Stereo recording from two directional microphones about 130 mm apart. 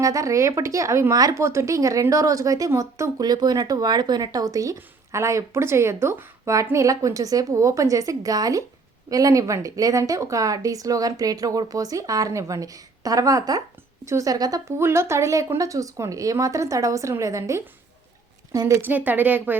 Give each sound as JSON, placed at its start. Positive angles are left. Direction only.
{"t": 0.0, "sound": "speech", "side_deg": -25}